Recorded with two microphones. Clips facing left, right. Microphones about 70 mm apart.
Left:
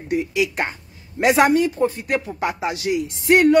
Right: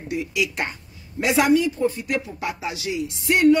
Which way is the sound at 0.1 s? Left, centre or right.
Left.